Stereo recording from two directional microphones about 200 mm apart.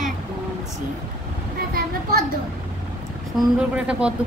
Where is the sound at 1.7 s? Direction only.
50° right (ahead or behind).